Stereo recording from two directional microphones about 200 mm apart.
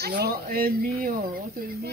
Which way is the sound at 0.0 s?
50° right (ahead or behind).